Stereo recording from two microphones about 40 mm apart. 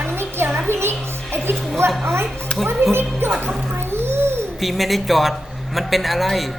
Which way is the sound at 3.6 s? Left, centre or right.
Right.